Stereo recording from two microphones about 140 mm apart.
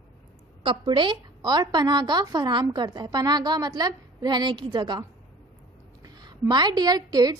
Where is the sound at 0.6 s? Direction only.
35° right (ahead or behind).